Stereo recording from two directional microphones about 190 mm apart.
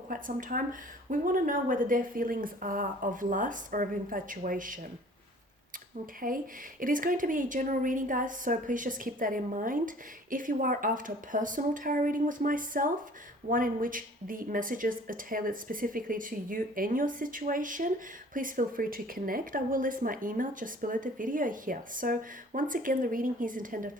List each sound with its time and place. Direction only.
0.1 s a woman's voice: 45° right (ahead or behind)
6.1 s a woman's voice: 45° right (ahead or behind)